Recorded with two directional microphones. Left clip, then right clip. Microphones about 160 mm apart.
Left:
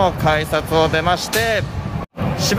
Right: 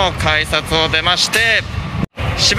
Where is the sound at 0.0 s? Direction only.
15° left (ahead or behind).